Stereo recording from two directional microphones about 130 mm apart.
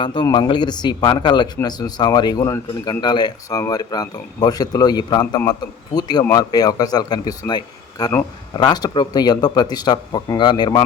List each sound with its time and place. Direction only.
0.0 s a man's voice: 40° left (ahead or behind)